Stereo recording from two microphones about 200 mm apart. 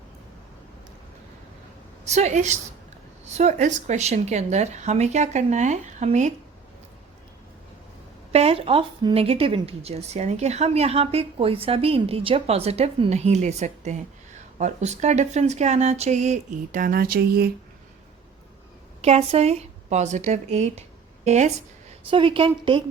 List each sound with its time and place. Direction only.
2.0 s a woman's voice: 35° right (ahead or behind)
8.3 s a woman's voice: 30° right (ahead or behind); by 17.5 s 50° right (ahead or behind)
19.0 s a woman's voice: 30° right (ahead or behind)